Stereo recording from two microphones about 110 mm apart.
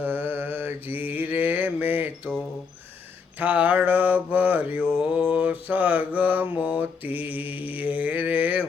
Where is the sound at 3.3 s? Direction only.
15° right (ahead or behind).